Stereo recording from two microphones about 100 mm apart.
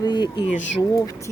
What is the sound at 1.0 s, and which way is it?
Speech, 35° left (ahead or behind).